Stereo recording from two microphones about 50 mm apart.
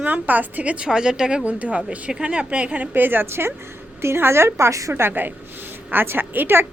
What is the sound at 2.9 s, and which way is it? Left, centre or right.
A woman's voice, right.